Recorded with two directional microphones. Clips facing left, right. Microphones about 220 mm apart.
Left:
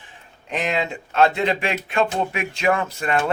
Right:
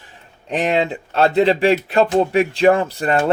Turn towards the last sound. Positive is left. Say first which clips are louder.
# right 5 dB
turn(degrees=-35)  # may be behind; listen again after turning